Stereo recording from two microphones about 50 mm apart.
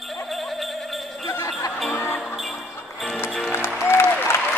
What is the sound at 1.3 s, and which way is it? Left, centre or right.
Jingle bell, left.